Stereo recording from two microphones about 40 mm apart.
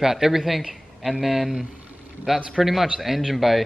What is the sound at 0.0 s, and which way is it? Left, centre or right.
A man's voice, centre.